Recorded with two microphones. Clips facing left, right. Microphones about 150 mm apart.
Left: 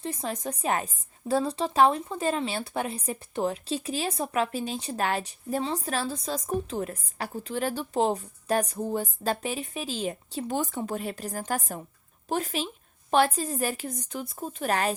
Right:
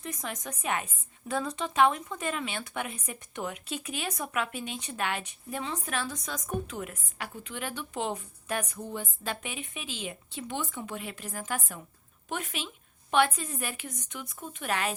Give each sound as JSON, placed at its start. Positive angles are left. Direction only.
{"t": 0.0, "sound": "a woman's voice", "side_deg": 30}